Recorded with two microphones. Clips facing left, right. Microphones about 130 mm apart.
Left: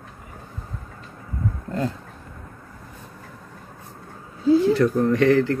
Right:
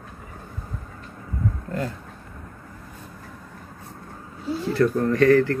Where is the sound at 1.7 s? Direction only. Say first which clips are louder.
Left 3 dB; 25° left (ahead or behind).